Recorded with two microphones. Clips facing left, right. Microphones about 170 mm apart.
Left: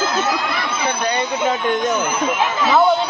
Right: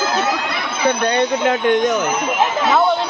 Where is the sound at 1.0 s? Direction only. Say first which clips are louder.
Right 1 dB; 70° right (ahead or behind).